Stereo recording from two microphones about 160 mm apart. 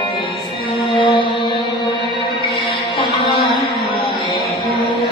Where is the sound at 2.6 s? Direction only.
30° left (ahead or behind).